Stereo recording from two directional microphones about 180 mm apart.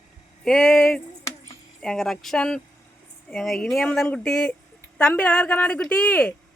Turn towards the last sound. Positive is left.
turn(degrees=5)  # may be behind; listen again after turning